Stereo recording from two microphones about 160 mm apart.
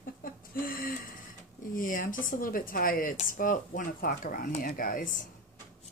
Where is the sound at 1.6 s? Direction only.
60° left (ahead or behind).